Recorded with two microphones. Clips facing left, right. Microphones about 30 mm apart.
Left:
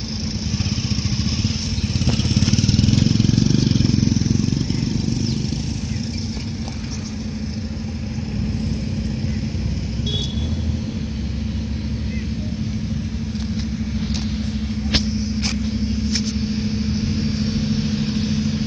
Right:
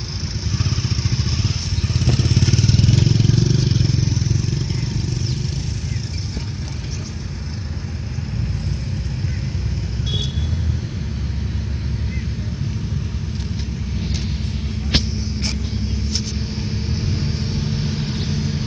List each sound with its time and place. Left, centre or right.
0.7 s vehicle: left
2.0 s motorcycle: left
2.5 s vehicle: left
16.9 s vehicle: right
17.3 s vehicle: left
17.7 s vehicle: right